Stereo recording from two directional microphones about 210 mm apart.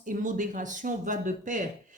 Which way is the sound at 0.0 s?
40° right (ahead or behind).